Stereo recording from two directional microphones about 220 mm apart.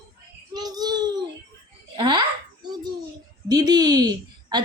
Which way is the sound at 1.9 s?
20° right (ahead or behind).